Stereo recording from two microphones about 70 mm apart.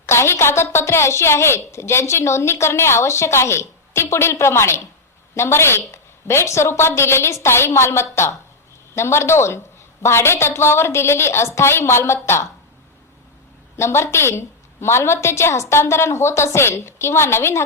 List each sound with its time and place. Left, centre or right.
0.0 s a woman's voice: left
13.7 s a woman's voice: left